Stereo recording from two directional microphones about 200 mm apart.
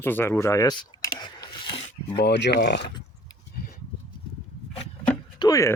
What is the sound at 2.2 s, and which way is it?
Speech, 55° left (ahead or behind).